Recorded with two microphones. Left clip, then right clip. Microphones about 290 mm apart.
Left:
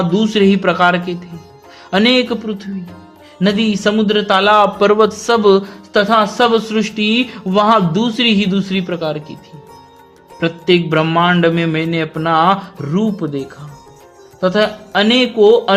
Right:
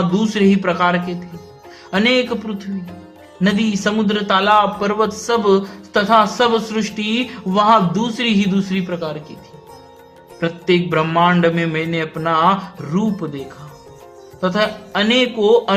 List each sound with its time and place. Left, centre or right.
0.2 s a man's voice: left
10.4 s a man's voice: left
14.4 s a man's voice: left